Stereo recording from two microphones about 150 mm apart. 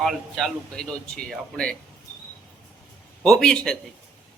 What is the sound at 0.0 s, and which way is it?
Speech, centre (ahead or behind).